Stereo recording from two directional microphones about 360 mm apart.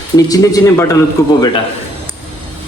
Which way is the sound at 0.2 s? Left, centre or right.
Centre.